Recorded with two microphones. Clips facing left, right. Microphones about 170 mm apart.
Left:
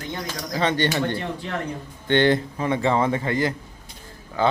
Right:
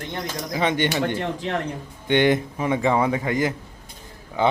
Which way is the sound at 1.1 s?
45° right (ahead or behind).